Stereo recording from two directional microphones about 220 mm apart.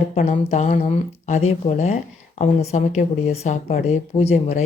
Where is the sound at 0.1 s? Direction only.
30° left (ahead or behind).